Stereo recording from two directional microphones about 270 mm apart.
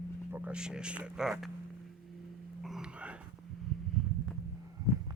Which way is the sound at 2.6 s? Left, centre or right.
Centre.